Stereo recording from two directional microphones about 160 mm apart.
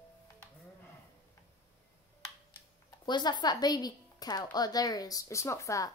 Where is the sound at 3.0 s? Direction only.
25° left (ahead or behind).